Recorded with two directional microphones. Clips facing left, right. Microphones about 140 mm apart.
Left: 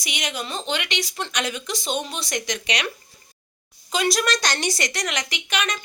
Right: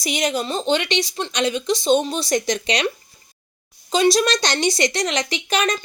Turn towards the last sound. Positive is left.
turn(degrees=-35)  # may be behind; listen again after turning